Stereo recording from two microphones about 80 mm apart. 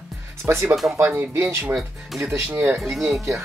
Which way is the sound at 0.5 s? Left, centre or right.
Right.